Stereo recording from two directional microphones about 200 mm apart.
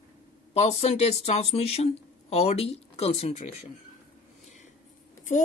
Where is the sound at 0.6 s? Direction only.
35° left (ahead or behind).